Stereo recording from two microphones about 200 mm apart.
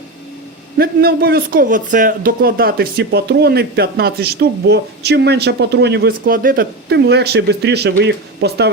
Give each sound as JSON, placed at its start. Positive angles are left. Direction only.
{"t": 0.8, "sound": "a man's voice", "side_deg": -50}